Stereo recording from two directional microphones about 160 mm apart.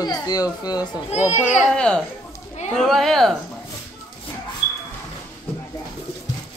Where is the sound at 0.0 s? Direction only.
25° left (ahead or behind).